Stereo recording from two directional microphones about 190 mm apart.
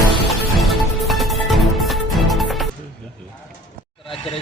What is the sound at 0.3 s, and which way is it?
Music, centre (ahead or behind).